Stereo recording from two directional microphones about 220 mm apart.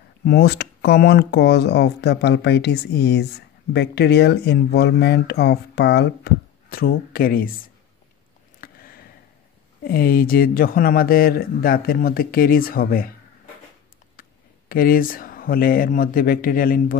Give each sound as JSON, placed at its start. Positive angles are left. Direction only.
{"t": 0.2, "sound": "speech", "side_deg": 50}
{"t": 8.5, "sound": "a sound", "side_deg": 40}
{"t": 9.8, "sound": "speech", "side_deg": 40}
{"t": 14.7, "sound": "speech", "side_deg": 40}